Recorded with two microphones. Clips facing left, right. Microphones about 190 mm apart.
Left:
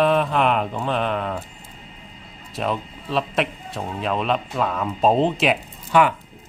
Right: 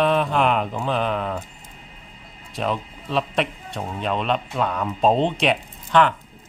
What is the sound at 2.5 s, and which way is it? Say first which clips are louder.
Speech: even; centre (ahead or behind).